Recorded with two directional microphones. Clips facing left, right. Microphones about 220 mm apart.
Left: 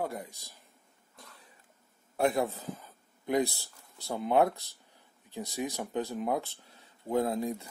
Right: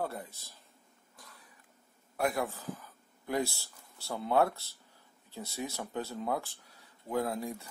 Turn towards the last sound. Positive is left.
turn(degrees=20)  # may be behind; listen again after turning